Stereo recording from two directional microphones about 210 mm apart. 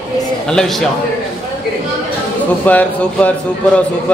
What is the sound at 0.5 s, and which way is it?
Speech, 5° left (ahead or behind).